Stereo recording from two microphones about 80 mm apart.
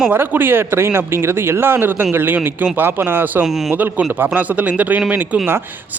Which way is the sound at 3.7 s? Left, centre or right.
Right.